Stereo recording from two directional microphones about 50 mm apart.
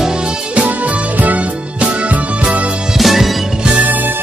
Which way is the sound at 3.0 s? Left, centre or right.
Centre.